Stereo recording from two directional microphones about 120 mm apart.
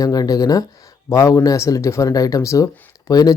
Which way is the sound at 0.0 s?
30° left (ahead or behind).